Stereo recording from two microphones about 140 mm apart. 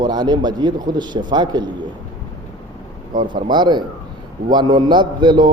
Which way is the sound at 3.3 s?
35° right (ahead or behind).